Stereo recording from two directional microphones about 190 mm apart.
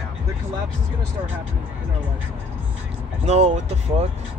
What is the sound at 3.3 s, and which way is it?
Speech, 35° right (ahead or behind).